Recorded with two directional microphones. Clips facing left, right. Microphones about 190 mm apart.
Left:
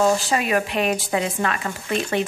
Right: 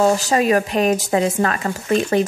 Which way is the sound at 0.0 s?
40° right (ahead or behind).